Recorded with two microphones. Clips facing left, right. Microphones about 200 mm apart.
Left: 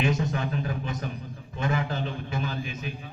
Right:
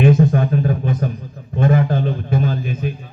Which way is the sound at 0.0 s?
55° right (ahead or behind).